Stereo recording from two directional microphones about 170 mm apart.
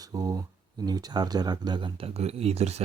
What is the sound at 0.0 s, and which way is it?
Speech, 20° right (ahead or behind).